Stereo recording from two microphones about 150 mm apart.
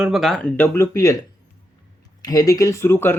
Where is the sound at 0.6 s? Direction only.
15° left (ahead or behind).